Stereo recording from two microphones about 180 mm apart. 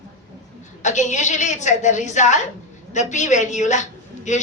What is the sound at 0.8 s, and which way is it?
A woman's voice, 40° left (ahead or behind).